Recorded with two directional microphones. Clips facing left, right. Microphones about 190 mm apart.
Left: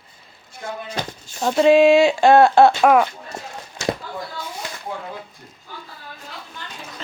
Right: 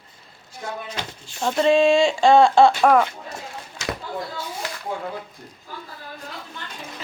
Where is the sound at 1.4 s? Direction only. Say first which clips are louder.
Left 4 dB; 5° left (ahead or behind).